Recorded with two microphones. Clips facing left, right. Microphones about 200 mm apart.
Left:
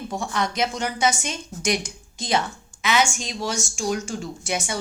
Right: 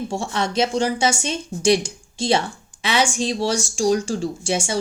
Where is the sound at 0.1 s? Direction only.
25° right (ahead or behind).